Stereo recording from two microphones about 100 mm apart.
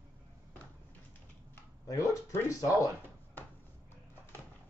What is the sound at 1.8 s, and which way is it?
Speech, 30° left (ahead or behind).